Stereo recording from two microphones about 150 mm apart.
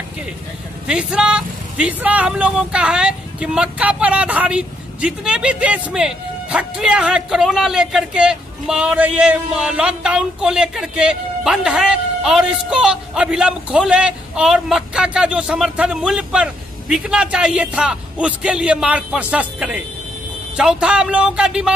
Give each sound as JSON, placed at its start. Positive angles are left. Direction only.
{"t": 0.8, "sound": "a man's voice", "side_deg": -5}